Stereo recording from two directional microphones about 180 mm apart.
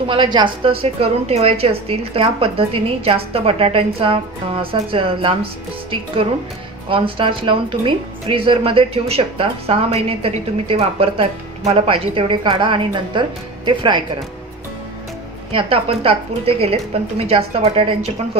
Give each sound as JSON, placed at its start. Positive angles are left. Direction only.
{"t": 0.1, "sound": "a woman's voice", "side_deg": -25}
{"t": 15.5, "sound": "a woman's voice", "side_deg": -30}